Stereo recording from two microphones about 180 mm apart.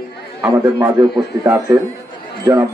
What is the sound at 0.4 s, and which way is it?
Speech, 15° right (ahead or behind).